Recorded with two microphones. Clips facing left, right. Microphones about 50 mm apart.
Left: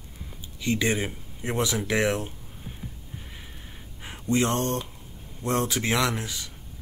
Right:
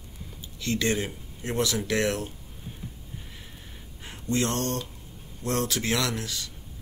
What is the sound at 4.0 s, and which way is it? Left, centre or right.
Speech, centre.